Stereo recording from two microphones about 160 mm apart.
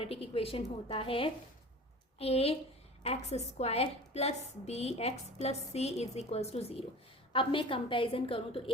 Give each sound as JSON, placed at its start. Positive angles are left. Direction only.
{"t": 0.0, "sound": "a woman's voice", "side_deg": 35}